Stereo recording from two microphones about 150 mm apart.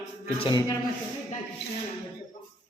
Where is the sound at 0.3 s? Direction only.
35° left (ahead or behind).